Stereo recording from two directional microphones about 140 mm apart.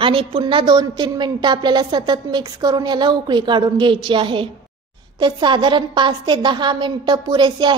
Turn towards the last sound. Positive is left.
turn(degrees=-35)  # may be behind; listen again after turning